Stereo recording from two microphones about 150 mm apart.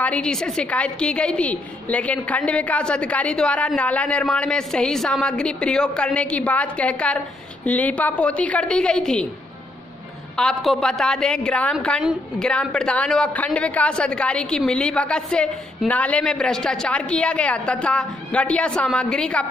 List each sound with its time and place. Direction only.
0.0 s a woman's voice: 5° left (ahead or behind)
10.3 s a woman's voice: centre (ahead or behind)
12.0 s a woman's voice: 5° right (ahead or behind)